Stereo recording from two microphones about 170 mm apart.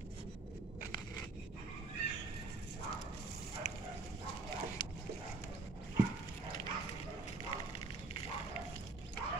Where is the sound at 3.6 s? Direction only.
45° left (ahead or behind).